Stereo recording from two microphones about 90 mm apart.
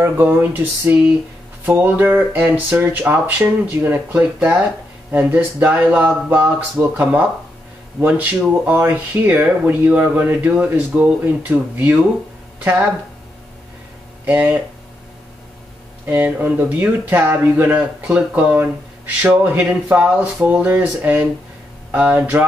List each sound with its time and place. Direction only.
0.0 s speech: 20° right (ahead or behind)
14.2 s speech: 15° right (ahead or behind)
16.1 s speech: 20° right (ahead or behind)